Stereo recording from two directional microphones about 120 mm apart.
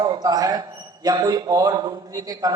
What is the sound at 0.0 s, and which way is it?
A man's voice, 35° right (ahead or behind).